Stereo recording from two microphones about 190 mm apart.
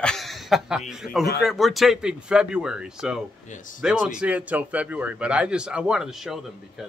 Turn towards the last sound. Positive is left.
turn(degrees=0)  # may be behind; listen again after turning